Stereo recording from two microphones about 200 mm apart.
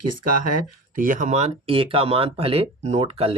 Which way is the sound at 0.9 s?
40° right (ahead or behind).